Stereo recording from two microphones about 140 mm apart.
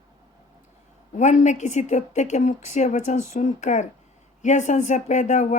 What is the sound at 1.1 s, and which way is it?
Speech, 60° left (ahead or behind).